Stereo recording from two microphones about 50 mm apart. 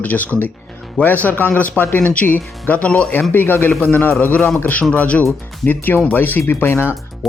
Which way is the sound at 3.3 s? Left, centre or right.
Left.